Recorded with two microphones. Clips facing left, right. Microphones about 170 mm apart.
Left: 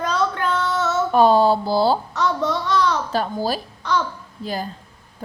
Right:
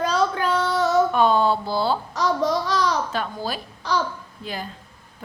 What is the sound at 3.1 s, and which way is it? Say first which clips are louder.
Speech: left 5 dB; 35° left (ahead or behind).